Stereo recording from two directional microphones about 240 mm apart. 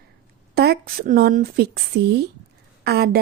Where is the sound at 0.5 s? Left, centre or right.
Right.